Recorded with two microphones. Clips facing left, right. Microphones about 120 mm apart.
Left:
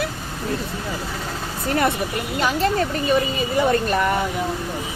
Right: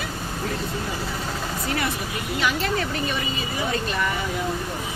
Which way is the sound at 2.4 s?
40° left (ahead or behind).